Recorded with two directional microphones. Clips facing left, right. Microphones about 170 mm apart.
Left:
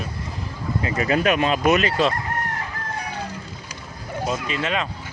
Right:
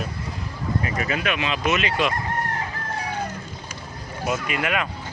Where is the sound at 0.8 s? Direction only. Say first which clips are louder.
Left 9 dB; 35° left (ahead or behind).